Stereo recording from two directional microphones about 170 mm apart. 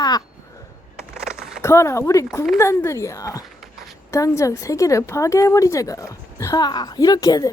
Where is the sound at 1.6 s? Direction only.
15° left (ahead or behind).